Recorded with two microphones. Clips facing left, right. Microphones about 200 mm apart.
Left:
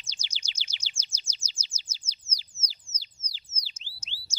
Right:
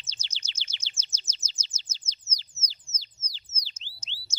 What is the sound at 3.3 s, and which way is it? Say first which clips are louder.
Bird: right 1 dB; 10° left (ahead or behind).